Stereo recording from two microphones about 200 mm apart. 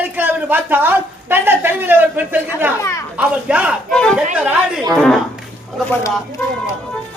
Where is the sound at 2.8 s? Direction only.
15° left (ahead or behind).